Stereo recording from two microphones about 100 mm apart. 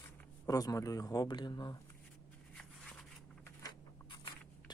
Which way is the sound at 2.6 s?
5° left (ahead or behind).